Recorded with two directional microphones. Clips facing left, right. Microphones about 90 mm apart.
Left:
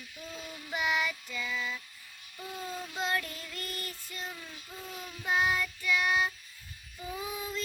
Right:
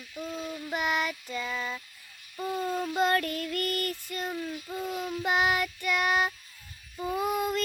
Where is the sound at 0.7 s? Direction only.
45° right (ahead or behind).